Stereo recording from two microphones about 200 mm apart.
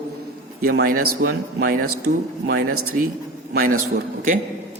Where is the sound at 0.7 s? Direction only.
50° right (ahead or behind).